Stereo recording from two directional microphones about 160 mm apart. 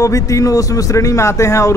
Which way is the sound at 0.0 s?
20° left (ahead or behind).